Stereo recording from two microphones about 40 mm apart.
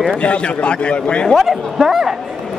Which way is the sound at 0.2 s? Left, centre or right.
Left.